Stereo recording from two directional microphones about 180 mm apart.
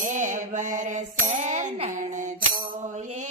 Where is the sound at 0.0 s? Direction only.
45° right (ahead or behind).